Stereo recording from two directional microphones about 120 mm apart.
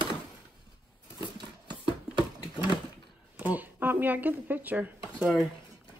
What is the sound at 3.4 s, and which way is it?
Speech, 15° right (ahead or behind).